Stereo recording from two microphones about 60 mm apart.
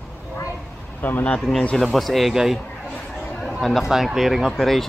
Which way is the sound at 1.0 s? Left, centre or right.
Left.